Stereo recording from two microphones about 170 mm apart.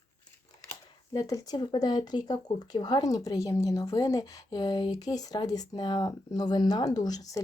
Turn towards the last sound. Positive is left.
turn(degrees=20)  # may be behind; listen again after turning